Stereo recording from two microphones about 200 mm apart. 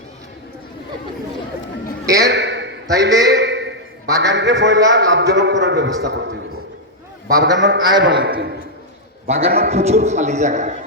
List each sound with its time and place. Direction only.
2.2 s a sound: 60° right (ahead or behind)
2.9 s a man's voice: 60° right (ahead or behind)
7.4 s a man's voice: 60° right (ahead or behind)
7.8 s a man's voice: 20° right (ahead or behind)
8.2 s a man's voice: 50° right (ahead or behind)
9.2 s a man's voice: 30° right (ahead or behind)
9.5 s a man's voice: 50° right (ahead or behind)
9.7 s a man's voice: 30° right (ahead or behind)